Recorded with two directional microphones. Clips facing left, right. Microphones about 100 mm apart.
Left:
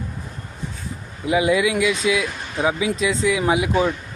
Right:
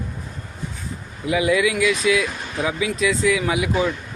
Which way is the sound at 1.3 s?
25° left (ahead or behind).